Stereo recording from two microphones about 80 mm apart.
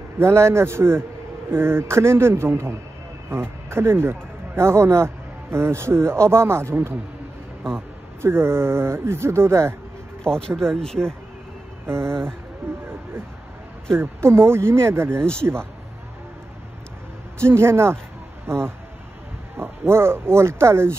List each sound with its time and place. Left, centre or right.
0.2 s a man's voice: right
8.2 s speech: right
10.2 s speech: centre
11.8 s speech: right
12.6 s a sound: right
13.9 s speech: right
17.4 s speech: right